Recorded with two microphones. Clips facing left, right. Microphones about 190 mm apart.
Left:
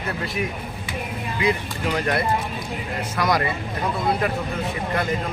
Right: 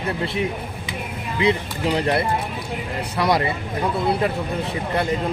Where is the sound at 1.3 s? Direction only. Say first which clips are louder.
Right 3 dB; 30° right (ahead or behind).